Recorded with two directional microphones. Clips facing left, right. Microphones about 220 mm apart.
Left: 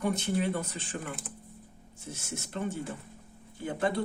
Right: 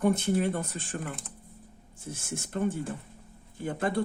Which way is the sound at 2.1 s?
50° right (ahead or behind).